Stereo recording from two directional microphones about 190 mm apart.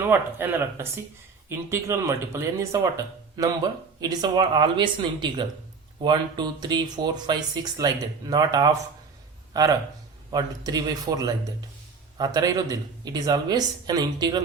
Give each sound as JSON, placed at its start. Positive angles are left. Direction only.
{"t": 0.0, "sound": "speech", "side_deg": -10}